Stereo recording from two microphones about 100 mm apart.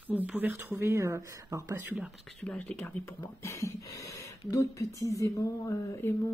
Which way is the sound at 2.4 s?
10° left (ahead or behind).